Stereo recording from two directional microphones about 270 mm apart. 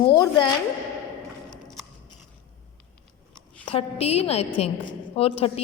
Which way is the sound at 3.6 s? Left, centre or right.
Left.